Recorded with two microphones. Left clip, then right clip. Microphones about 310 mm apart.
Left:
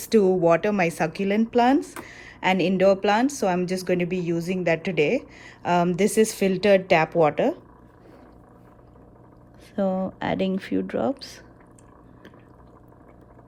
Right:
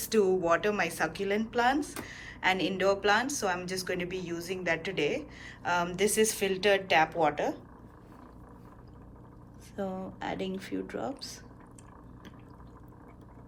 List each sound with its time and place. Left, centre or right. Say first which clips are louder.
0.0 s speech: left 7 dB; centre
9.7 s speech: left 11 dB; left